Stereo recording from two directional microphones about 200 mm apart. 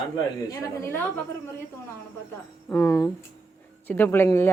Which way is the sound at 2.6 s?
15° left (ahead or behind).